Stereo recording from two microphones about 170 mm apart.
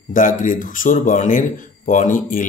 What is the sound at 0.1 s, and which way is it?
Speech, 50° left (ahead or behind).